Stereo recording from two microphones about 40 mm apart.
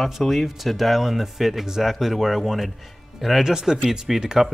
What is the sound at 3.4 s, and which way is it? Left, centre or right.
Speech, centre.